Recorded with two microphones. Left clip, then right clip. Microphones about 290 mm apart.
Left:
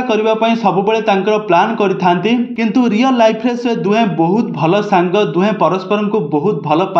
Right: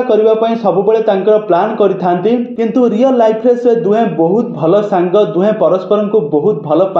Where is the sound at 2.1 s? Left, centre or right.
Left.